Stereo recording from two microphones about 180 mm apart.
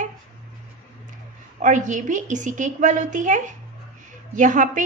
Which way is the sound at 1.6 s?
45° right (ahead or behind).